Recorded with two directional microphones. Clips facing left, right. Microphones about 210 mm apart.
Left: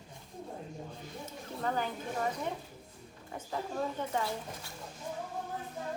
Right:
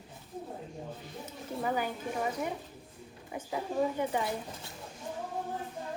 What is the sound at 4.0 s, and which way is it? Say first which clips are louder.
Speech: right 3 dB; 15° right (ahead or behind).